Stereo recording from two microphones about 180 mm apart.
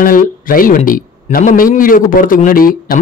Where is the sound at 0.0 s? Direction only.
50° left (ahead or behind).